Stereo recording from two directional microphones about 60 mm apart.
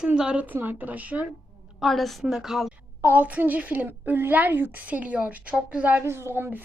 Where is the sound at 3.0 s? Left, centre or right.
Right.